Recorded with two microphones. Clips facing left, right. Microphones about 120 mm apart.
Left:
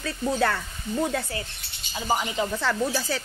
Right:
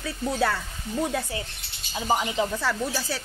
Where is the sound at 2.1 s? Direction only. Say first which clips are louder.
Right 1 dB; 15° right (ahead or behind).